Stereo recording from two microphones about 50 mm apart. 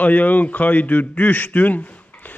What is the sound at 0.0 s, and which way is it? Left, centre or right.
A man's voice, left.